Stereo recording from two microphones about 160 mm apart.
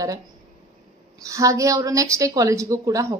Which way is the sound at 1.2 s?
20° right (ahead or behind).